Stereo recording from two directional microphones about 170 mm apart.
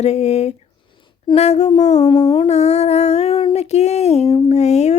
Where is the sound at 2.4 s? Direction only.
40° left (ahead or behind).